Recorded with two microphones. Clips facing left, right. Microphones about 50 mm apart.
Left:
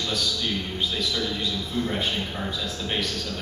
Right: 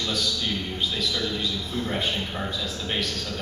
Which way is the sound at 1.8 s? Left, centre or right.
Centre.